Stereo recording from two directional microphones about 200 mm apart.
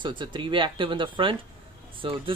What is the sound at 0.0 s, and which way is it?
Speech, 25° right (ahead or behind).